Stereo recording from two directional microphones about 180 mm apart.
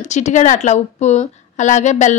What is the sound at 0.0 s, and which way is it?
A woman's voice, 40° left (ahead or behind).